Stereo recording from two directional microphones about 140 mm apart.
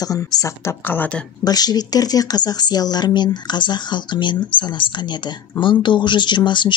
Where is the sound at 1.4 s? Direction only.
30° left (ahead or behind).